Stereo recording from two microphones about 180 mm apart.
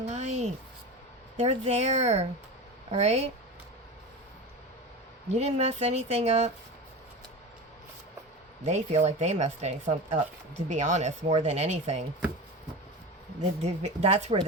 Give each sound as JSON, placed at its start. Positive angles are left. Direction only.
{"t": 0.0, "sound": "a sound", "side_deg": -40}
{"t": 1.4, "sound": "speech", "side_deg": -40}
{"t": 5.3, "sound": "speech", "side_deg": -35}
{"t": 8.6, "sound": "speech", "side_deg": -35}
{"t": 13.6, "sound": "speech", "side_deg": -35}